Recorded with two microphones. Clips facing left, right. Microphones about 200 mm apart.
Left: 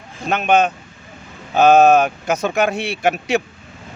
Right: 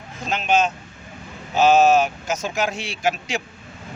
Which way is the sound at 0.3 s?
60° left (ahead or behind).